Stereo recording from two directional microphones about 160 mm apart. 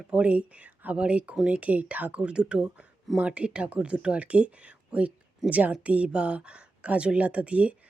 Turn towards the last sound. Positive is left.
turn(degrees=-10)  # may be behind; listen again after turning